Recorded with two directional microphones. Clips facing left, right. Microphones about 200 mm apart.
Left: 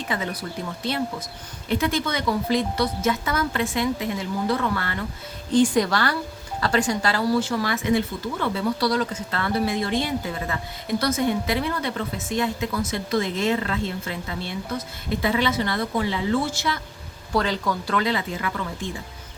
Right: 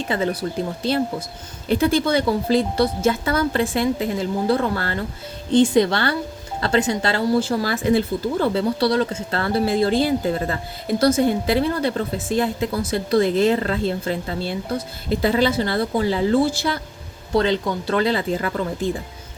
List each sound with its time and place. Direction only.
0.0 s speech: 30° right (ahead or behind)
5.5 s speech: 25° right (ahead or behind)